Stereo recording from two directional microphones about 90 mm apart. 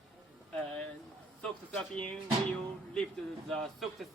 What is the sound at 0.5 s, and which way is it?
Speech, 10° left (ahead or behind).